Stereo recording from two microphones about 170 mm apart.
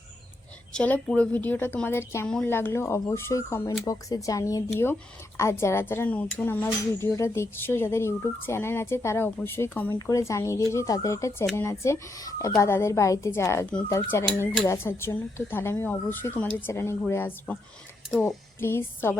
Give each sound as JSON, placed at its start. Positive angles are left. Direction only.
{"t": 0.7, "sound": "speech", "side_deg": 5}
{"t": 18.1, "sound": "speech", "side_deg": 0}
{"t": 18.6, "sound": "speech", "side_deg": 15}